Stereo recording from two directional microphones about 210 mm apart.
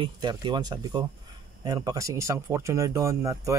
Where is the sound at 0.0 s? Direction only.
20° right (ahead or behind).